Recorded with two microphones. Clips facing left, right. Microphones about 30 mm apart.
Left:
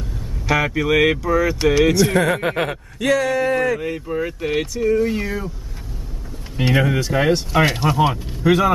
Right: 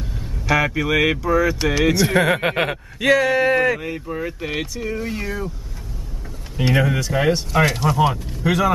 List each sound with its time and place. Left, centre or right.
0.5 s speech: centre
3.8 s speech: centre
6.5 s speech: centre
8.0 s speech: centre